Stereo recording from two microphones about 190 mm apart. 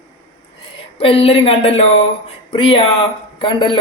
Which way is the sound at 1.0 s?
30° left (ahead or behind).